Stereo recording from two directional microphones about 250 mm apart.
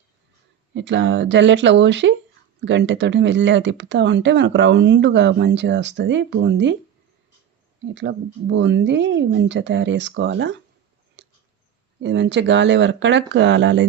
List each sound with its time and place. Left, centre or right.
0.7 s speech: right
7.9 s speech: right
11.2 s a sound: right
12.0 s speech: right